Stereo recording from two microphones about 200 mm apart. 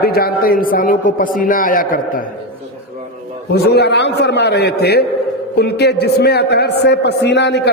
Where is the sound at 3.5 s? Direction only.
55° left (ahead or behind).